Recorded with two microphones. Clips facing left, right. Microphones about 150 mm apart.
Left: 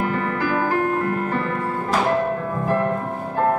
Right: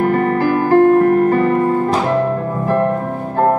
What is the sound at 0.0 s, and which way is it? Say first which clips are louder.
Music: right 8 dB; 50° right (ahead or behind).